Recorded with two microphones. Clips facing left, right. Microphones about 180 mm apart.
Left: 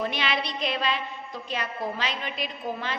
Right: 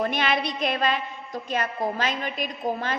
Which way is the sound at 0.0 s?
50° right (ahead or behind).